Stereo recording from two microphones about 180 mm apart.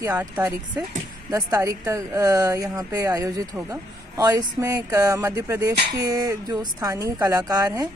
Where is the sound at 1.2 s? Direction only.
20° right (ahead or behind).